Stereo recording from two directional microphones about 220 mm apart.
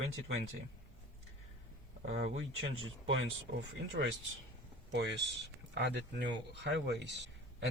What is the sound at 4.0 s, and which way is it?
Speech, 45° right (ahead or behind).